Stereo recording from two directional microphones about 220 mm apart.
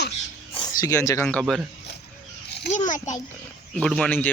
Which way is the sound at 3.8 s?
5° left (ahead or behind).